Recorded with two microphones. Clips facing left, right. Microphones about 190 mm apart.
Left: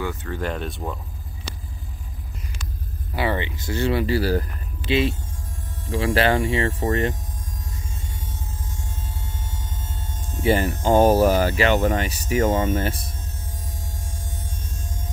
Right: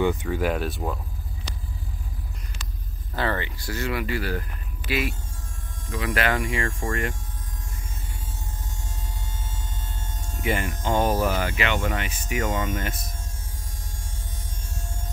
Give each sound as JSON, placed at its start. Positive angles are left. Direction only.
{"t": 0.0, "sound": "speech", "side_deg": -15}
{"t": 3.2, "sound": "speech", "side_deg": 15}
{"t": 10.4, "sound": "speech", "side_deg": 30}